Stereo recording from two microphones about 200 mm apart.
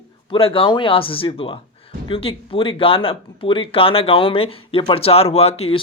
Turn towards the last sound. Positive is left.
turn(degrees=30)  # may be behind; listen again after turning